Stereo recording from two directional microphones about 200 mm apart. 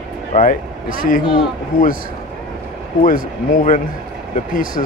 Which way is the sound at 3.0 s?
45° left (ahead or behind).